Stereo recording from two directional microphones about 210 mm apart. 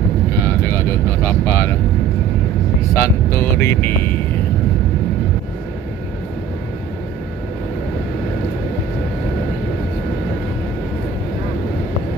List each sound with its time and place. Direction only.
0.4 s vehicle: 10° left (ahead or behind)
2.9 s speech: 10° left (ahead or behind)